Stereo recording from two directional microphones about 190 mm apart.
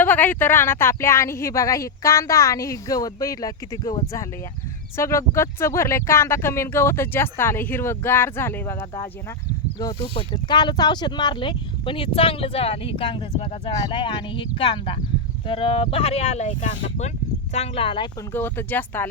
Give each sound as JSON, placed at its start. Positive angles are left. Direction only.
{"t": 0.0, "sound": "speech", "side_deg": 10}
{"t": 18.3, "sound": "speech", "side_deg": 10}